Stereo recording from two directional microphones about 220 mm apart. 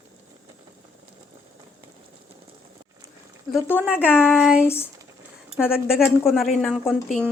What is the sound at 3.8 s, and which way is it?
Speech, 5° right (ahead or behind).